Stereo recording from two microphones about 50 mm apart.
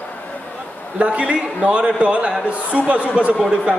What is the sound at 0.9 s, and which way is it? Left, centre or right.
A man's voice, right.